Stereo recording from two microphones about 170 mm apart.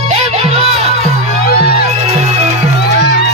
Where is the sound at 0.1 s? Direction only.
35° right (ahead or behind).